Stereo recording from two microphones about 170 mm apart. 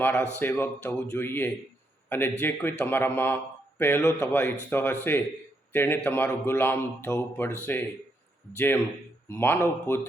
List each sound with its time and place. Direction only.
0.0 s a man's voice: 15° left (ahead or behind)
8.5 s a man's voice: 10° left (ahead or behind)